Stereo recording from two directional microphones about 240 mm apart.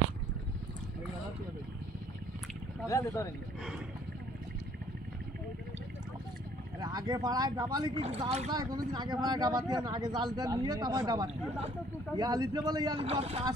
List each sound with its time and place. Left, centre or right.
2.9 s speech: centre
6.8 s speech: centre